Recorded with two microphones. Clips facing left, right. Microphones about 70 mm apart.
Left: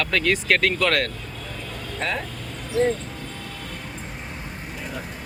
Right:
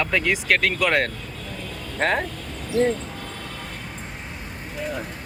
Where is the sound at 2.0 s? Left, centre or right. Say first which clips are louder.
Right 6 dB; right.